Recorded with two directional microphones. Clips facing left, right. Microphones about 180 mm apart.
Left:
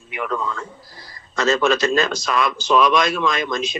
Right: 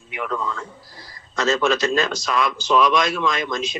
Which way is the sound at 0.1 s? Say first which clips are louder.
Left 2 dB; 60° left (ahead or behind).